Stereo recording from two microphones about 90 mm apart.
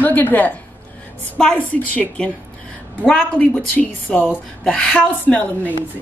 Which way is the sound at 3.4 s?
20° left (ahead or behind).